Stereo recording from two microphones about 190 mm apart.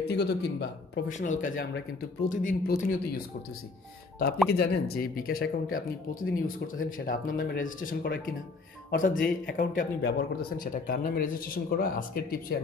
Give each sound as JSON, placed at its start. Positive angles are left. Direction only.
{"t": 0.1, "sound": "speech", "side_deg": 60}
{"t": 1.0, "sound": "speech", "side_deg": 40}
{"t": 4.5, "sound": "speech", "side_deg": 60}